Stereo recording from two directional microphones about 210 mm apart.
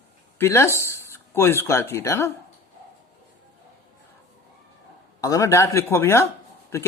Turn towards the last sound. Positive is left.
turn(degrees=15)  # may be behind; listen again after turning